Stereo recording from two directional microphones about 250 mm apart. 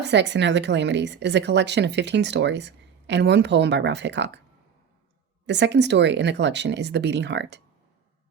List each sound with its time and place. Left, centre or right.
0.0 s a woman's voice: right
5.5 s a woman's voice: right